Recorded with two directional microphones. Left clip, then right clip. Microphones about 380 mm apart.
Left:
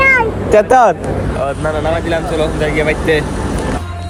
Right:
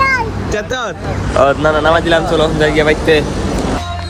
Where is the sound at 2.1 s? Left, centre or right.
Centre.